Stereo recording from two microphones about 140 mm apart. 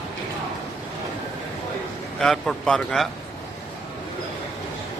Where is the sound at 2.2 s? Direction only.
Centre (ahead or behind).